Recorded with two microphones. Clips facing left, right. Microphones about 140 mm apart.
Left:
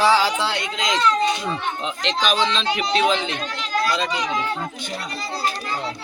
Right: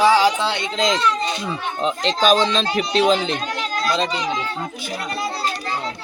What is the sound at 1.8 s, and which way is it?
Speech, 40° right (ahead or behind).